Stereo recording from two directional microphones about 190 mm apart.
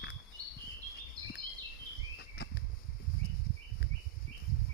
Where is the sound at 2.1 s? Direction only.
60° left (ahead or behind).